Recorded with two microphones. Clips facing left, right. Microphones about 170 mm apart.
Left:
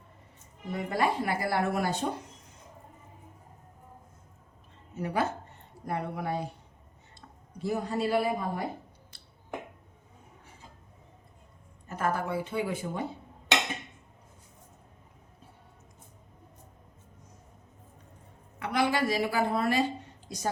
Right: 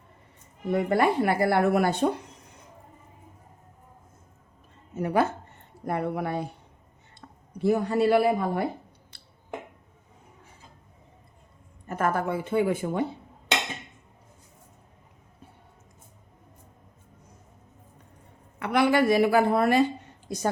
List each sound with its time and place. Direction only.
0.7 s speech: 60° right (ahead or behind)
4.9 s speech: 55° right (ahead or behind)
7.6 s a man's voice: 65° right (ahead or behind)
9.1 s a sound: 65° right (ahead or behind)
11.9 s a woman's voice: 55° right (ahead or behind)
18.6 s a woman's voice: 60° right (ahead or behind)